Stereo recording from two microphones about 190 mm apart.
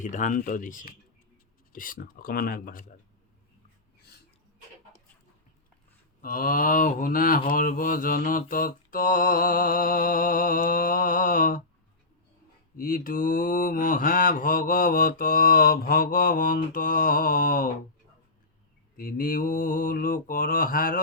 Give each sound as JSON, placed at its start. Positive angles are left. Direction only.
{"t": 0.0, "sound": "mantra", "side_deg": 40}
{"t": 6.2, "sound": "mantra", "side_deg": 50}
{"t": 12.7, "sound": "mantra", "side_deg": 45}
{"t": 18.9, "sound": "mantra", "side_deg": 50}